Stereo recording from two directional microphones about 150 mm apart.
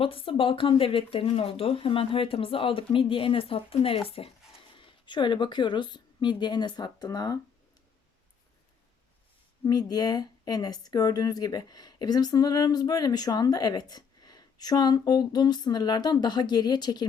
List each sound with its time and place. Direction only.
0.0 s speech: 35° left (ahead or behind)
9.6 s speech: 25° left (ahead or behind)